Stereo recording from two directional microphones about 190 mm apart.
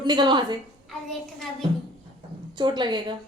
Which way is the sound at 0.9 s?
Centre (ahead or behind).